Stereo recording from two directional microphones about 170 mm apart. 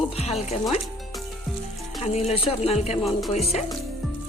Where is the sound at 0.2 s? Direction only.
35° left (ahead or behind).